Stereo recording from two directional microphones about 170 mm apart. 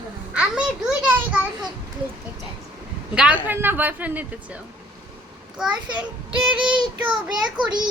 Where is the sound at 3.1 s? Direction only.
5° right (ahead or behind).